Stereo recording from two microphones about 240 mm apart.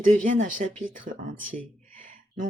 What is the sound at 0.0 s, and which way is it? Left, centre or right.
Speech, right.